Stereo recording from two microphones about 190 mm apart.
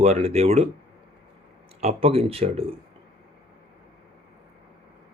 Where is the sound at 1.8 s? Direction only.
30° right (ahead or behind).